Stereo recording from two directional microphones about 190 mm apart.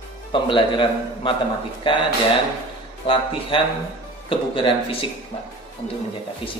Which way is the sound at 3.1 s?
30° left (ahead or behind).